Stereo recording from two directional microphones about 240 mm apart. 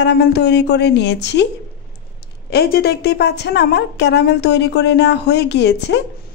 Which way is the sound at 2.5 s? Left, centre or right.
Left.